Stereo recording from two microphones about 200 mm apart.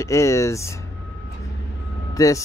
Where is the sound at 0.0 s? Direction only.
15° left (ahead or behind).